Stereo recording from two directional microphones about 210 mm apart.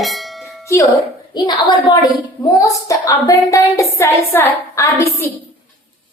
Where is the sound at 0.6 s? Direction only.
15° left (ahead or behind).